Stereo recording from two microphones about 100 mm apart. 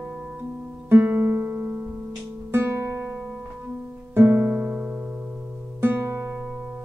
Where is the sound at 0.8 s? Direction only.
15° right (ahead or behind).